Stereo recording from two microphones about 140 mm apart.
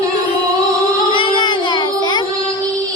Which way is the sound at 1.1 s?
35° left (ahead or behind).